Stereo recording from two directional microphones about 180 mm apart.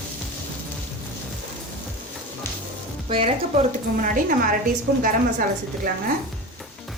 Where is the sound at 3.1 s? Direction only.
35° right (ahead or behind).